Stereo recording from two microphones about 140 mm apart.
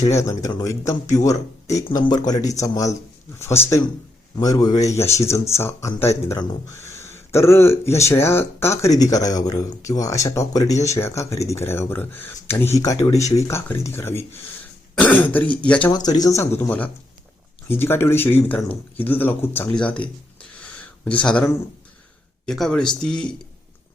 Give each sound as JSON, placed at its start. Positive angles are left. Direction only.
{"t": 0.1, "sound": "speech", "side_deg": 20}
{"t": 15.9, "sound": "speech", "side_deg": 30}